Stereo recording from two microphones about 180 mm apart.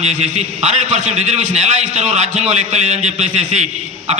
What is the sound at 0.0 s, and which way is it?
A man's voice, 40° right (ahead or behind).